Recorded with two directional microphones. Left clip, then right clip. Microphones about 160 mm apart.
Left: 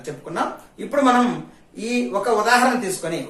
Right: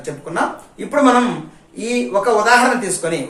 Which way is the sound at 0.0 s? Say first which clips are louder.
Right 5 dB; centre (ahead or behind).